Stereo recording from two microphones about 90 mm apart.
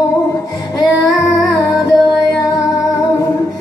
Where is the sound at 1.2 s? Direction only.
40° left (ahead or behind).